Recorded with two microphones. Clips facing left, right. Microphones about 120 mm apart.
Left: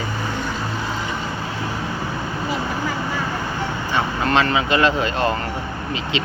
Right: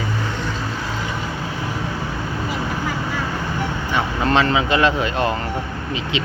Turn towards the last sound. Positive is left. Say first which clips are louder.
# right 1 dB
turn(degrees=-20)  # may be behind; listen again after turning